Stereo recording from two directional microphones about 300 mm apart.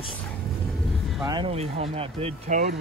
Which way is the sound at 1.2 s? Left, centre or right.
Centre.